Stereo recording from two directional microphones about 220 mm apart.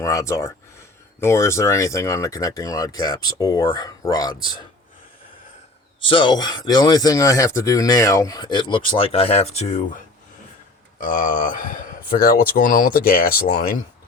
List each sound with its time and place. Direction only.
0.0 s speech: 15° left (ahead or behind)
6.0 s speech: 25° left (ahead or behind); by 13.7 s 40° left (ahead or behind)